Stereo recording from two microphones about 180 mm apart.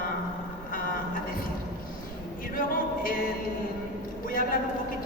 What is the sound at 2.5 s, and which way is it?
Speech, 50° left (ahead or behind).